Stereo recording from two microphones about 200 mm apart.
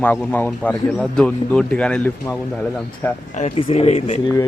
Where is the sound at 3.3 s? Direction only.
30° left (ahead or behind).